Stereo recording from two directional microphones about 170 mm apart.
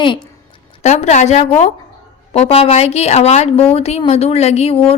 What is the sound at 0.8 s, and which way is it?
A woman's voice, 40° left (ahead or behind).